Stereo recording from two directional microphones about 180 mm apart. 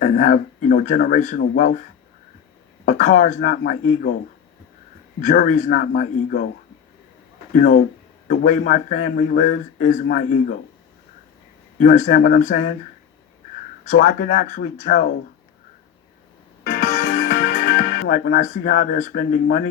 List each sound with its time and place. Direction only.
0.0 s speech: 45° left (ahead or behind)
2.8 s speech: 45° left (ahead or behind)
5.2 s speech: 45° left (ahead or behind)
7.5 s speech: 50° left (ahead or behind)
11.8 s speech: 45° left (ahead or behind)
13.8 s speech: 50° left (ahead or behind)
16.6 s music: 50° left (ahead or behind)
18.3 s speech: 45° left (ahead or behind)